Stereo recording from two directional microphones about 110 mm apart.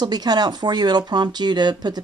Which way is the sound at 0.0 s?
40° right (ahead or behind).